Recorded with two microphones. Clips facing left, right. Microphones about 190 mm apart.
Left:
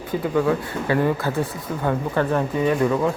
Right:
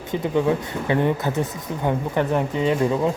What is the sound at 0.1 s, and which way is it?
Speech, 20° right (ahead or behind).